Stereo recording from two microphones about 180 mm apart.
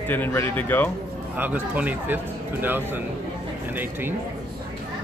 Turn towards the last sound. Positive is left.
turn(degrees=-10)  # may be behind; listen again after turning